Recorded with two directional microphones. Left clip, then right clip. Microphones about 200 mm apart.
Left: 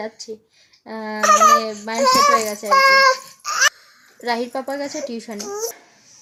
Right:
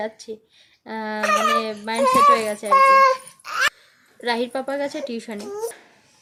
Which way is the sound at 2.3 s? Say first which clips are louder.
Left 2 dB; centre (ahead or behind).